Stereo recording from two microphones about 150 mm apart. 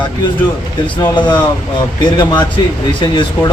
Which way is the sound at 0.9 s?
30° left (ahead or behind).